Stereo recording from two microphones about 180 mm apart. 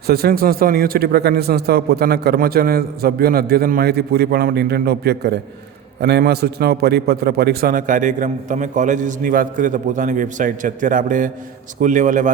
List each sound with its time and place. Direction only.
0.1 s a man's voice: 60° right (ahead or behind); by 12.3 s 45° right (ahead or behind)